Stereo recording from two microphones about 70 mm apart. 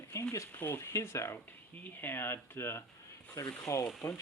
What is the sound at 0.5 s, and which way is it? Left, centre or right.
Speech, left.